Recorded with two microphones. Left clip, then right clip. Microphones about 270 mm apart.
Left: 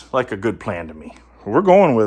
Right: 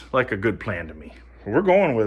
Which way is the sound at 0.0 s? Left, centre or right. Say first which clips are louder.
Left 2 dB; centre.